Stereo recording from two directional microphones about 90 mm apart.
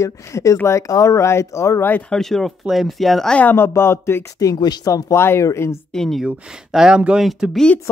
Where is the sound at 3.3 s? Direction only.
25° left (ahead or behind).